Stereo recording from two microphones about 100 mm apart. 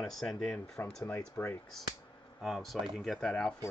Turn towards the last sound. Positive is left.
turn(degrees=5)  # may be behind; listen again after turning